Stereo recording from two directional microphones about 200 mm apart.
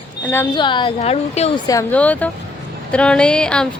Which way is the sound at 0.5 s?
25° left (ahead or behind).